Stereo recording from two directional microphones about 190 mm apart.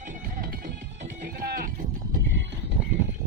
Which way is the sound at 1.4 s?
45° right (ahead or behind).